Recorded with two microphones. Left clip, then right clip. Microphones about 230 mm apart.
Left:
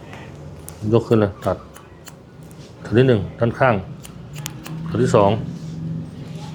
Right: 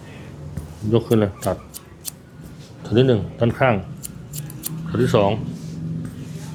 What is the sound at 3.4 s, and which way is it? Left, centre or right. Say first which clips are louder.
Speech: left 1 dB; centre.